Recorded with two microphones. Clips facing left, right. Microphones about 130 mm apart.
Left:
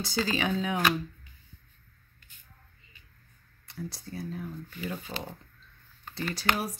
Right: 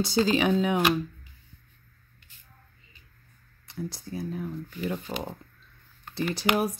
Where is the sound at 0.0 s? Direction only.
20° right (ahead or behind).